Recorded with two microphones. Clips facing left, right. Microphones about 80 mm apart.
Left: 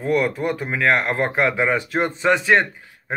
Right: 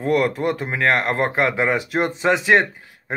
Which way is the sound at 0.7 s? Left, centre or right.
Centre.